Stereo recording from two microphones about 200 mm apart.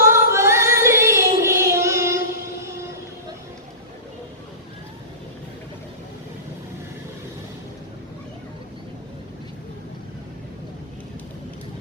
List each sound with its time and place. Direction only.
0.0 s female singing: 15° right (ahead or behind)